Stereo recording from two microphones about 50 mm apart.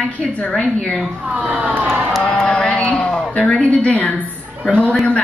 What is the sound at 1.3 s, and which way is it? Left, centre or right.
Speech, right.